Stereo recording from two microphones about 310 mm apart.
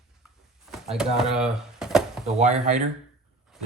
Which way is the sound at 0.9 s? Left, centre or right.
Centre.